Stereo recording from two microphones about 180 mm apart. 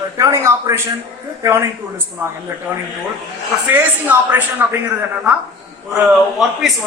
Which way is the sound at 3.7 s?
10° right (ahead or behind).